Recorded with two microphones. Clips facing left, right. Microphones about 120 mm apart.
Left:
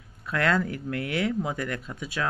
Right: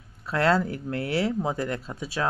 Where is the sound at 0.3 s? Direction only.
30° right (ahead or behind).